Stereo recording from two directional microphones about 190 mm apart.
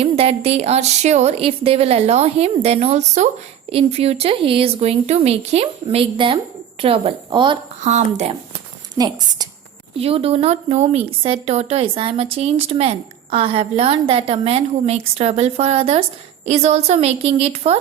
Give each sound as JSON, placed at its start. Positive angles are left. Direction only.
{"t": 0.0, "sound": "a woman's voice", "side_deg": -30}
{"t": 7.8, "sound": "speech", "side_deg": -40}
{"t": 9.0, "sound": "a woman's voice", "side_deg": -20}